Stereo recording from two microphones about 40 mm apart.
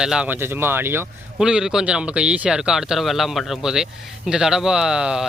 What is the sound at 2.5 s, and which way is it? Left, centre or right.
Speech, centre.